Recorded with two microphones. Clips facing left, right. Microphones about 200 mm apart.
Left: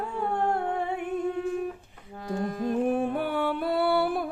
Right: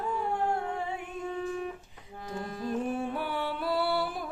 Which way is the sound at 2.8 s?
55° left (ahead or behind).